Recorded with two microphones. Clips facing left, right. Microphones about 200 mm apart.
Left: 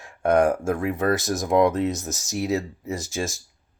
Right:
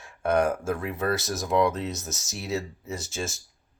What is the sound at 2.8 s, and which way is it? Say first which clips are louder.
Speech: left 5 dB; 15° left (ahead or behind).